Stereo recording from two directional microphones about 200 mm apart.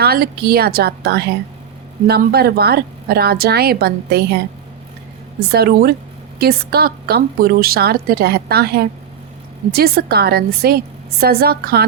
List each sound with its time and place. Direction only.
0.0 s a woman's voice: 50° right (ahead or behind)
5.5 s a woman's voice: 50° right (ahead or behind)